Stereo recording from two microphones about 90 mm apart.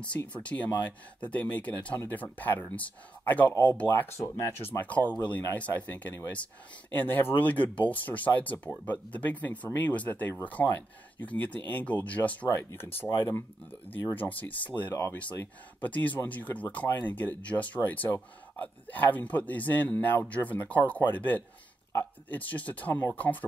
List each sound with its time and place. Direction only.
0.5 s speech: 15° left (ahead or behind)